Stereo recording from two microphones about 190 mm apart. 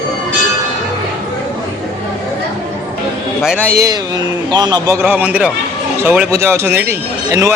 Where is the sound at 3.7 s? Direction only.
15° right (ahead or behind).